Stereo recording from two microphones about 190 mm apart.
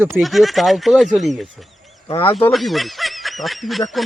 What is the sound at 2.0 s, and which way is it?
Speech, 30° left (ahead or behind).